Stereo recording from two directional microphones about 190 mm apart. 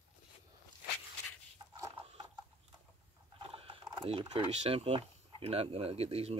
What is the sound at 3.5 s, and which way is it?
Speech, 30° right (ahead or behind).